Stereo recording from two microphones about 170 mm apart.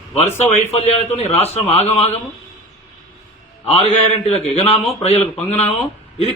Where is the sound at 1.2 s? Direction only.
35° left (ahead or behind).